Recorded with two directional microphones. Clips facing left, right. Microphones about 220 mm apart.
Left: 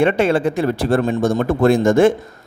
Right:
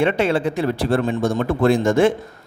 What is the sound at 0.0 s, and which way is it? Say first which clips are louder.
A man's voice: left 3 dB; 50° left (ahead or behind).